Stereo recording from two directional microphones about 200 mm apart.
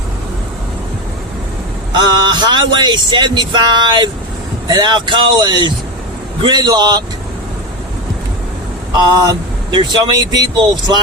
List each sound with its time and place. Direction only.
1.9 s speech: 20° right (ahead or behind)
8.9 s speech: 20° right (ahead or behind)